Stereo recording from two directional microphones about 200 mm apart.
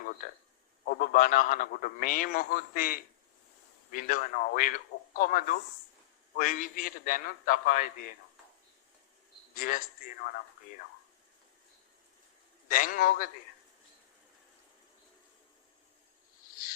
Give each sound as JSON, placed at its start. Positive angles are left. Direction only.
{"t": 0.9, "sound": "a man's voice", "side_deg": 45}
{"t": 9.6, "sound": "a man's voice", "side_deg": 40}
{"t": 12.7, "sound": "a man's voice", "side_deg": 45}